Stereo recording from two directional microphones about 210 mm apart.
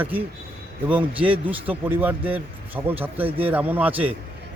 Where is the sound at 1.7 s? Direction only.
10° right (ahead or behind).